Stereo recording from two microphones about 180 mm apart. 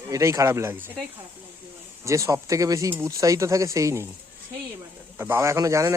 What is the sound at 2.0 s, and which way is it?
Speech, 15° right (ahead or behind).